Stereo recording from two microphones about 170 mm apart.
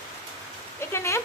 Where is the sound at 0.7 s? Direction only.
15° left (ahead or behind).